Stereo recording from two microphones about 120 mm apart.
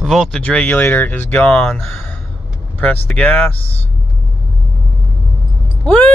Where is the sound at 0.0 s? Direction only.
5° left (ahead or behind).